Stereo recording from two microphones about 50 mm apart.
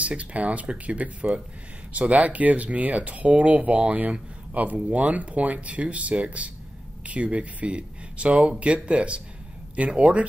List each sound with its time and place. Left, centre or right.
0.0 s speech: right